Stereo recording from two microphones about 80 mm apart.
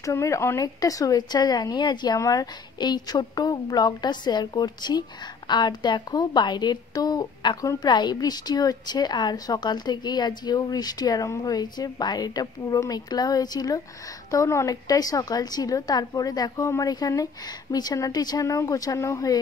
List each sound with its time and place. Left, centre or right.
0.0 s a woman's voice: left
2.1 s a woman's voice: left
2.8 s a woman's voice: left
14.3 s a woman's voice: left